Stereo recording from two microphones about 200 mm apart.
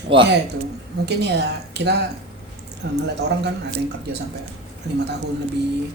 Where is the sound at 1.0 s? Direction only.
55° right (ahead or behind).